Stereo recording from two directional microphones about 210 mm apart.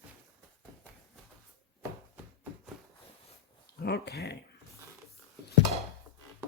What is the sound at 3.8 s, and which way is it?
Speech, 50° left (ahead or behind).